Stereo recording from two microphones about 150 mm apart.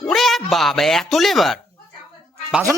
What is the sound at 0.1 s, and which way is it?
Speech, centre (ahead or behind).